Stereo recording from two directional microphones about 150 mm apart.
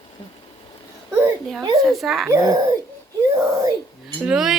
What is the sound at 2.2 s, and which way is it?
Speech, 25° right (ahead or behind).